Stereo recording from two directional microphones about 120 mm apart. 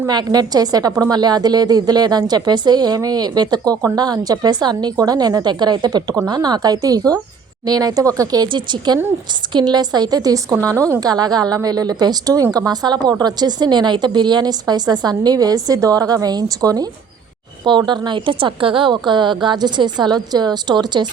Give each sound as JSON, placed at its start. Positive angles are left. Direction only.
{"t": 0.1, "sound": "a woman's voice", "side_deg": -35}